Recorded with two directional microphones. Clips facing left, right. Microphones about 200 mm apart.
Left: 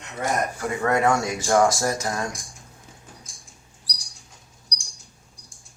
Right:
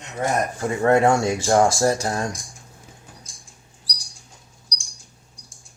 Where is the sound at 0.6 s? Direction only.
30° right (ahead or behind).